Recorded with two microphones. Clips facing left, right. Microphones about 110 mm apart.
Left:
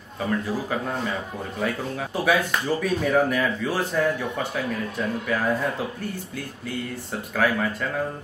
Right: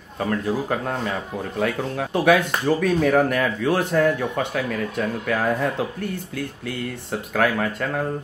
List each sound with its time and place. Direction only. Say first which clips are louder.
0.2 s speech: right 3 dB; 60° right (ahead or behind)
7.1 s speech: right 2 dB; 60° right (ahead or behind)